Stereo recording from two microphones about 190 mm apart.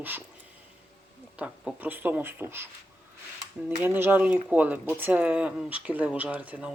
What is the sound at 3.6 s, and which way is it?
Speech, 10° right (ahead or behind).